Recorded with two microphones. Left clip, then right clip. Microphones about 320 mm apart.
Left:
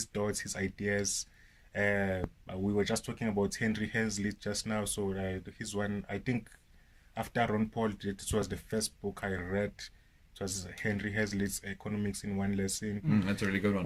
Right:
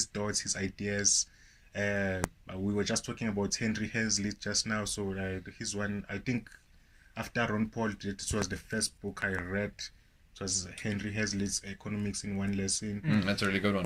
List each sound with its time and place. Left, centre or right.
0.1 s speech: left
13.5 s speech: centre